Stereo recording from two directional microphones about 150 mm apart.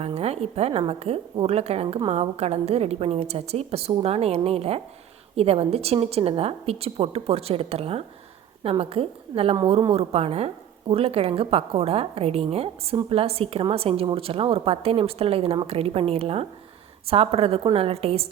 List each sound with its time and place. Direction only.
0.0 s a woman's voice: 45° right (ahead or behind)